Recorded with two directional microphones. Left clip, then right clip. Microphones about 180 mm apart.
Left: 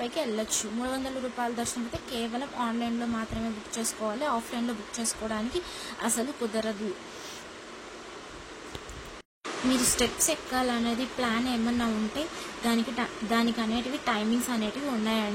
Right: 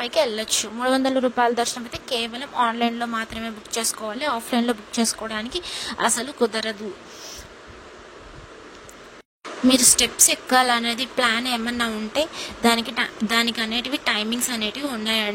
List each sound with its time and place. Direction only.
0.0 s speech: 55° right (ahead or behind)
9.9 s speech: 65° right (ahead or behind)